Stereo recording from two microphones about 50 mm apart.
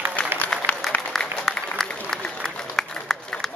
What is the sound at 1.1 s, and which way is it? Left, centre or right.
Applause, centre.